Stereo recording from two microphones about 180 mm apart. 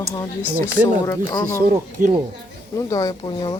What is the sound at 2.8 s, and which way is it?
Speech, 20° left (ahead or behind).